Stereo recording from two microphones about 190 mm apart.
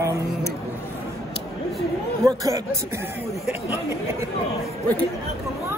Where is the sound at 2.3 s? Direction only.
15° right (ahead or behind).